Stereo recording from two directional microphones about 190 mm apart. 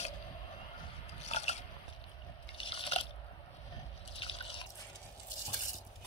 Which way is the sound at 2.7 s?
30° left (ahead or behind).